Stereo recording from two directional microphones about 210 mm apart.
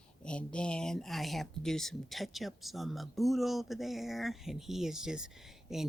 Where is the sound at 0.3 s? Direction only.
5° left (ahead or behind).